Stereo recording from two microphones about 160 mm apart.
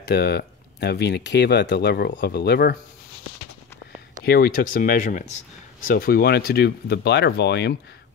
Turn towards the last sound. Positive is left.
turn(degrees=90)